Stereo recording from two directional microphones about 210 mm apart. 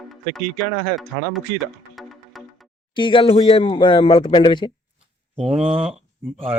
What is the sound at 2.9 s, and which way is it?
Speech, 25° left (ahead or behind).